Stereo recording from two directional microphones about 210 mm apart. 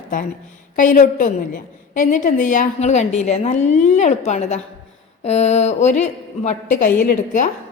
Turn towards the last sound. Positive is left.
turn(degrees=40)  # may be behind; listen again after turning